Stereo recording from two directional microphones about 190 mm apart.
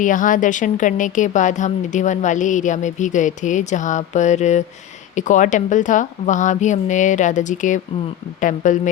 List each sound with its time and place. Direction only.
0.0 s a woman's voice: 45° left (ahead or behind)